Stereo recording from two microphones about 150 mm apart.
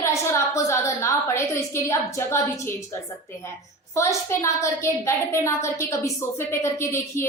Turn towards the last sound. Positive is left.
turn(degrees=20)  # may be behind; listen again after turning